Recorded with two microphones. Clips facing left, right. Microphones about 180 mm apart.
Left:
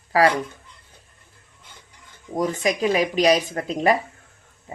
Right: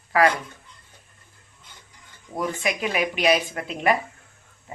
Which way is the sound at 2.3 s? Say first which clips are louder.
Left 4 dB; 40° left (ahead or behind).